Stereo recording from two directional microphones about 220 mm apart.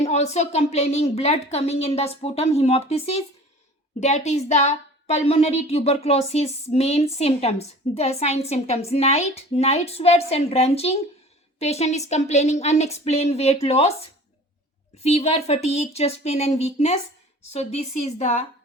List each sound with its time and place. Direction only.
0.0 s speech: 30° left (ahead or behind)